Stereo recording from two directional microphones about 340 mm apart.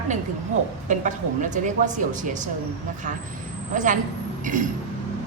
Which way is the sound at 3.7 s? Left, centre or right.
Right.